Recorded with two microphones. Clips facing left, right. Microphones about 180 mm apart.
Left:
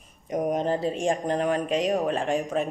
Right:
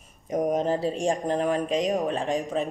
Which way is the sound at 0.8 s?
35° right (ahead or behind).